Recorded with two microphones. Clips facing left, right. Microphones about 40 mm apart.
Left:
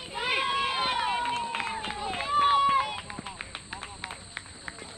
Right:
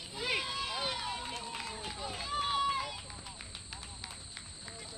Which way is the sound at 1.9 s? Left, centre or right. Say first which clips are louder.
Left 10 dB; left.